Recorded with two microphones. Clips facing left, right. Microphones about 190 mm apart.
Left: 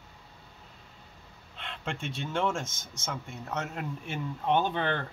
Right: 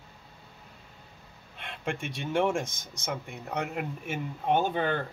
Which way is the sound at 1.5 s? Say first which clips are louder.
Right 3 dB; 10° right (ahead or behind).